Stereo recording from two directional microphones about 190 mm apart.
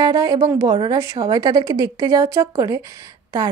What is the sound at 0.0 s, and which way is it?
A woman's voice, 20° right (ahead or behind).